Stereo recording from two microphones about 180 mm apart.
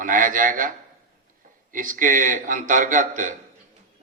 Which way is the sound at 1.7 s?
50° right (ahead or behind).